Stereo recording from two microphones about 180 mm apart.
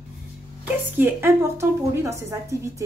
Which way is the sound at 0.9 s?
10° right (ahead or behind).